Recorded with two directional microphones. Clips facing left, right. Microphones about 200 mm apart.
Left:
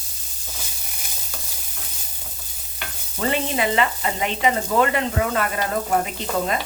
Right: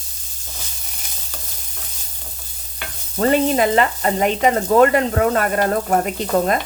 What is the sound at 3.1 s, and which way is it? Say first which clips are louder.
Speech: right 7 dB; 45° right (ahead or behind).